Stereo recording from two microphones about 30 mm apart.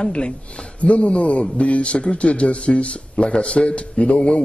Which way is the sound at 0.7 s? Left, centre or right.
Left.